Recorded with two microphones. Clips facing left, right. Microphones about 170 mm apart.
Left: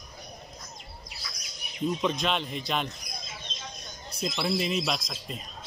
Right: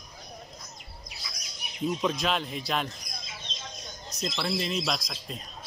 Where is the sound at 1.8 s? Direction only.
Centre (ahead or behind).